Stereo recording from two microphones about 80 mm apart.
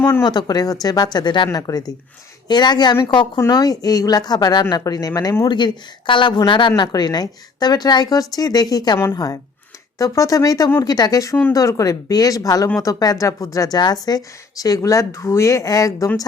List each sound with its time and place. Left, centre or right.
0.3 s a woman's voice: left
1.5 s speech: left
2.5 s a woman's voice: left
3.5 s speech: left
5.5 s a woman's voice: left